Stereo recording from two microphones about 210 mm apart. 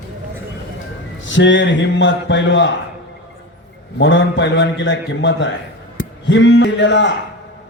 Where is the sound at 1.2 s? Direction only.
60° left (ahead or behind).